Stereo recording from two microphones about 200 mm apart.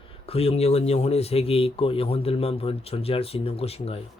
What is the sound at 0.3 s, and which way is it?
Speech, 30° left (ahead or behind).